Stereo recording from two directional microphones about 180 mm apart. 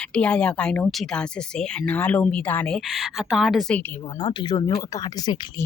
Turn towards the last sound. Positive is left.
turn(degrees=20)  # may be behind; listen again after turning